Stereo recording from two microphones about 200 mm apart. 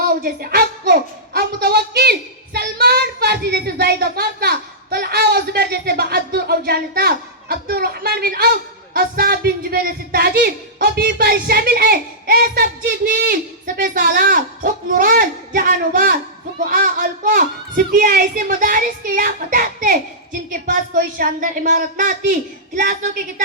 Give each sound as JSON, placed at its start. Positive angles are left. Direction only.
{"t": 0.2, "sound": "a woman's voice", "side_deg": -50}